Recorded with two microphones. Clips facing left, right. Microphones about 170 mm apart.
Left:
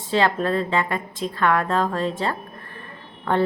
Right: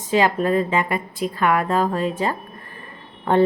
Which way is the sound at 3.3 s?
15° right (ahead or behind).